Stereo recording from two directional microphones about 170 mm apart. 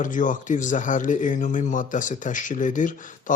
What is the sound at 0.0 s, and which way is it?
Speech, 50° left (ahead or behind).